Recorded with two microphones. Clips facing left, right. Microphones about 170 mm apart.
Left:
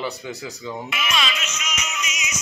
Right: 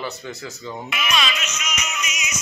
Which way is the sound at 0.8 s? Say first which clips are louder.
Right 2 dB; 55° right (ahead or behind).